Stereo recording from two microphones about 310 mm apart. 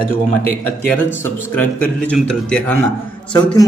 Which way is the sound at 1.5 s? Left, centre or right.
Centre.